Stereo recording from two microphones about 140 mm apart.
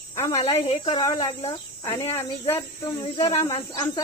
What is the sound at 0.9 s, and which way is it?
Speech, 25° left (ahead or behind).